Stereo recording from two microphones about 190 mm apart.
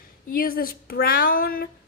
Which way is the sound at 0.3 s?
50° left (ahead or behind).